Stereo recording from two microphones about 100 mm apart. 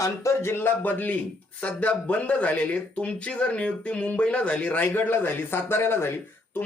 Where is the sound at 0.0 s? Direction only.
30° left (ahead or behind).